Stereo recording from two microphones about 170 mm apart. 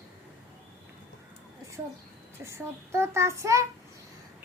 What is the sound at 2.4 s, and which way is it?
A child's voice, 15° right (ahead or behind).